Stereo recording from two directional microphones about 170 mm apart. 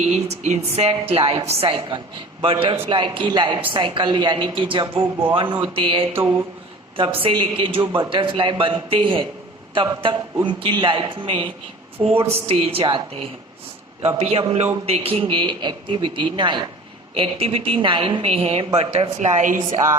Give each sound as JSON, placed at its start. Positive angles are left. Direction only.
{"t": 0.1, "sound": "a man's voice", "side_deg": -45}
{"t": 12.0, "sound": "speech", "side_deg": -10}
{"t": 12.5, "sound": "a man's voice", "side_deg": -35}